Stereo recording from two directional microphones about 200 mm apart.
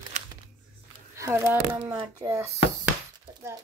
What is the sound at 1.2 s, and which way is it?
Speech, 10° right (ahead or behind).